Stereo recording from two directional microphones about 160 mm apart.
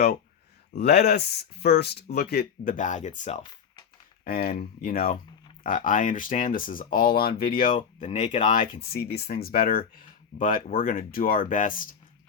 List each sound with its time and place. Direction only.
0.8 s speech: 85° left
2.7 s speech: 50° left (ahead or behind)
4.2 s speech: 70° left (ahead or behind)
5.6 s speech: 55° left (ahead or behind)
8.8 s speech: 75° left (ahead or behind); by 11.9 s 55° left (ahead or behind)